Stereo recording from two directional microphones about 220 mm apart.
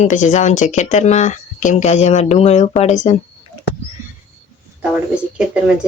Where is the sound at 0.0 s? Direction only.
35° left (ahead or behind).